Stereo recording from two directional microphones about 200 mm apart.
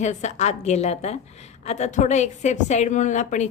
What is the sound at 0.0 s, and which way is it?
A woman's voice, 35° left (ahead or behind).